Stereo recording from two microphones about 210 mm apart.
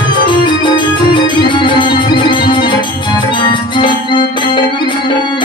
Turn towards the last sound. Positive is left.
turn(degrees=20)  # may be behind; listen again after turning